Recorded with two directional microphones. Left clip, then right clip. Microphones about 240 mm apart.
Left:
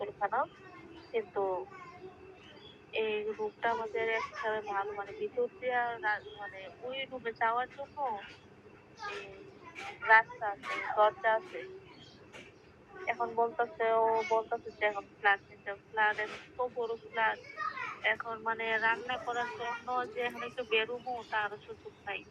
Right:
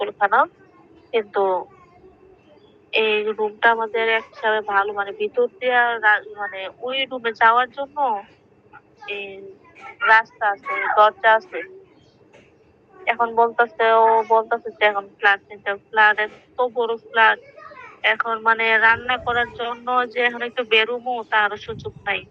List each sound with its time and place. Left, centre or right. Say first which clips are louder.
0.0 s a sound: right 15 dB; right
1.1 s a woman's voice: right 14 dB; right
2.9 s a woman's voice: right 14 dB; right
10.0 s a woman's voice: right 10 dB; right
13.1 s a woman's voice: right 14 dB; right